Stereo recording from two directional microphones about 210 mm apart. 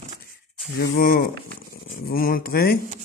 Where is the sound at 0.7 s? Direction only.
45° left (ahead or behind).